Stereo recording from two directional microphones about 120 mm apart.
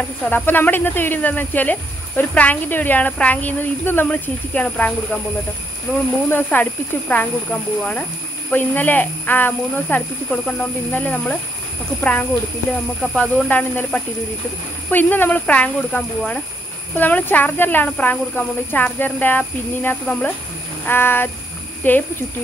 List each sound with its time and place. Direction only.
0.2 s speech: 15° left (ahead or behind)
6.3 s speech: 15° left (ahead or behind)
8.5 s speech: 15° left (ahead or behind)